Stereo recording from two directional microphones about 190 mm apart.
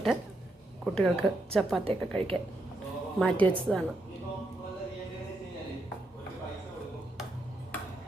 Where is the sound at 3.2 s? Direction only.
5° left (ahead or behind).